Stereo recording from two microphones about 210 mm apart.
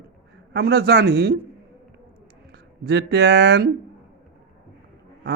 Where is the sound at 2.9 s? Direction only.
50° right (ahead or behind).